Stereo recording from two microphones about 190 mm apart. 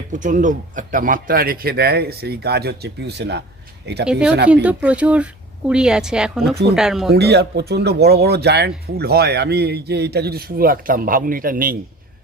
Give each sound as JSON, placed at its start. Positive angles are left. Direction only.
{"t": 0.1, "sound": "speech", "side_deg": -40}
{"t": 4.0, "sound": "speech", "side_deg": -5}
{"t": 7.1, "sound": "speech", "side_deg": -60}